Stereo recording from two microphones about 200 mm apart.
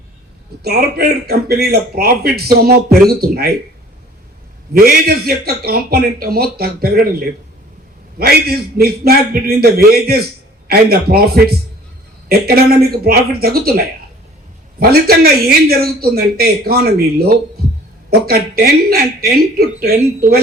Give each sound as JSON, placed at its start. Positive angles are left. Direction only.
{"t": 0.6, "sound": "a man's voice", "side_deg": -50}
{"t": 4.7, "sound": "a man's voice", "side_deg": -50}
{"t": 8.2, "sound": "a man's voice", "side_deg": -50}